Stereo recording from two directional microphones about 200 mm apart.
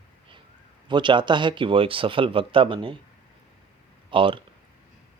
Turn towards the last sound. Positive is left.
turn(degrees=-25)  # may be behind; listen again after turning